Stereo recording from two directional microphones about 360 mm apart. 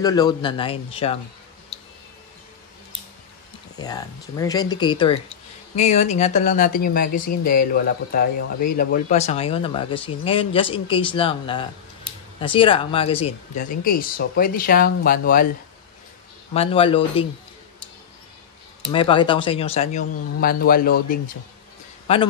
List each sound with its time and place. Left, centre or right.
0.0 s speech: centre
3.7 s speech: centre
16.5 s speech: centre
18.9 s a man's voice: centre